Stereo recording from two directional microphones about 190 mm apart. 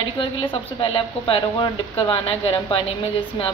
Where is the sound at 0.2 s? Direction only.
25° left (ahead or behind).